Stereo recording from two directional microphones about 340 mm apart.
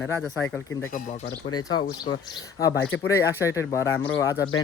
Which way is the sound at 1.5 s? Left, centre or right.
Centre.